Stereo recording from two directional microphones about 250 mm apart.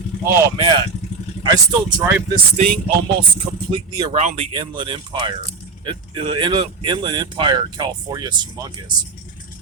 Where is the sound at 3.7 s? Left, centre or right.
Centre.